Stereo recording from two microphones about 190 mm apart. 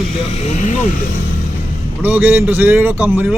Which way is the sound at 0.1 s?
35° left (ahead or behind).